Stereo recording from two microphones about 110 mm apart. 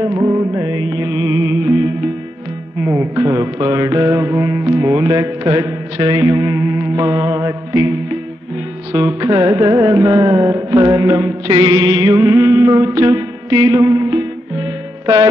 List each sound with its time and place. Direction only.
0.0 s music: 30° right (ahead or behind)
2.8 s mantra: 25° right (ahead or behind)
4.9 s music: 35° right (ahead or behind)
8.9 s music: 30° right (ahead or behind)